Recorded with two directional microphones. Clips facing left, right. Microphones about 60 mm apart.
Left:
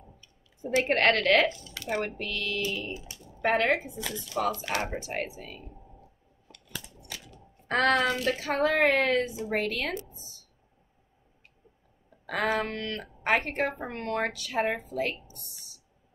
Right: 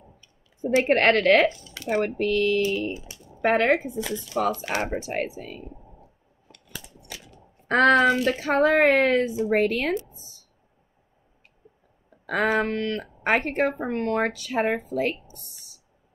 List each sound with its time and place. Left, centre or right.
0.8 s speech: right
7.6 s speech: right
12.3 s speech: right